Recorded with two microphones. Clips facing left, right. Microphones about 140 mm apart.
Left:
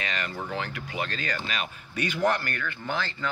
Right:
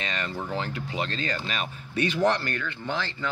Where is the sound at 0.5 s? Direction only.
25° right (ahead or behind).